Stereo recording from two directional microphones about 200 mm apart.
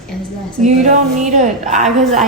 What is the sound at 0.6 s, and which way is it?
A woman's voice, 35° right (ahead or behind).